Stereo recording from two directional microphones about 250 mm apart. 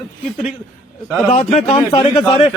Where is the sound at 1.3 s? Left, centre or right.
Centre.